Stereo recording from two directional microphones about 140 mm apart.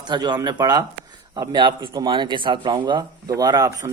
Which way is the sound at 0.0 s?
30° right (ahead or behind).